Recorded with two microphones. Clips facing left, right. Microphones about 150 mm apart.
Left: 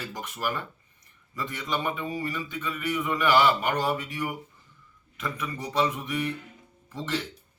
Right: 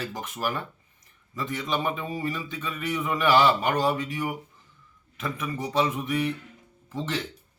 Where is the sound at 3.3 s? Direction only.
30° right (ahead or behind).